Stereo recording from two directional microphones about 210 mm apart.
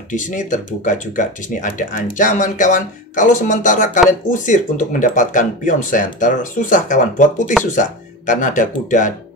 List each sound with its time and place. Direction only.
0.1 s speech: 35° left (ahead or behind)